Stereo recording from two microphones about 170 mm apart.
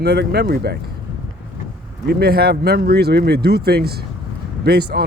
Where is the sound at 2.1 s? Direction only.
65° right (ahead or behind).